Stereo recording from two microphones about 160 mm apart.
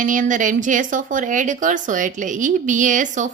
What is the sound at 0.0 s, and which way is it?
A woman's voice, 55° right (ahead or behind).